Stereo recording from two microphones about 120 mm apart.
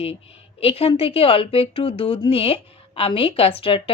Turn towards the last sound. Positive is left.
turn(degrees=50)  # may be behind; listen again after turning